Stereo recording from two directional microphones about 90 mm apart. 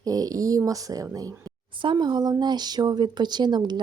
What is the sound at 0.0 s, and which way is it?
Speech, 45° right (ahead or behind).